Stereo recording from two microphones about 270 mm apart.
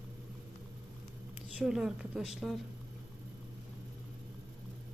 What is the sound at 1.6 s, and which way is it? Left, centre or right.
Speech, centre.